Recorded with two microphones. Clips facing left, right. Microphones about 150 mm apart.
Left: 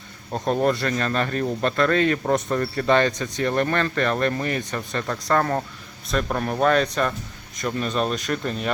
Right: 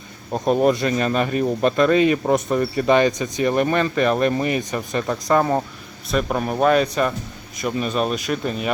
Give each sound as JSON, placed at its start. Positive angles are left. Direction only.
{"t": 0.3, "sound": "speech", "side_deg": -15}